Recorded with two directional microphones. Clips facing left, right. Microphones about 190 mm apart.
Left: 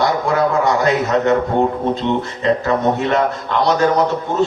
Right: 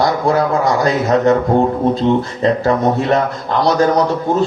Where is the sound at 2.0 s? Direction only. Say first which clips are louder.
Right 5 dB; 35° right (ahead or behind).